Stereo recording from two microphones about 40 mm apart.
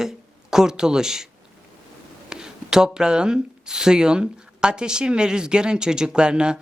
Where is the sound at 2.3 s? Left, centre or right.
Centre.